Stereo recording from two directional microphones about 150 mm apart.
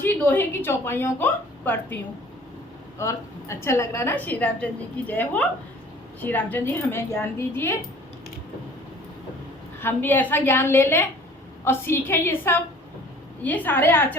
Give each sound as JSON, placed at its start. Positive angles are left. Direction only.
{"t": 0.0, "sound": "a woman's voice", "side_deg": 15}
{"t": 3.0, "sound": "a woman's voice", "side_deg": 20}
{"t": 9.8, "sound": "a woman's voice", "side_deg": 15}